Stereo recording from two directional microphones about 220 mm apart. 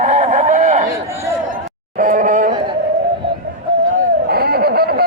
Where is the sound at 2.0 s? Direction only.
40° right (ahead or behind).